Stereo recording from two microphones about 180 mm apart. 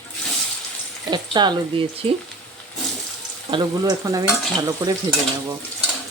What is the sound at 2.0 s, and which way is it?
Speech, 30° right (ahead or behind).